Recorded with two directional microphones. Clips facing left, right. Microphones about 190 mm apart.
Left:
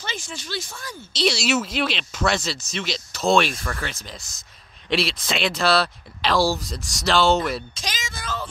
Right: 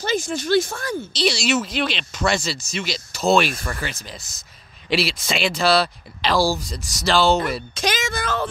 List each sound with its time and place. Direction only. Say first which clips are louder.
0.0 s speech: right 11 dB; 40° right (ahead or behind); by 0.9 s 55° right (ahead or behind)
1.1 s speech: even; centre (ahead or behind)
7.7 s a sound: right 10 dB; 60° right (ahead or behind)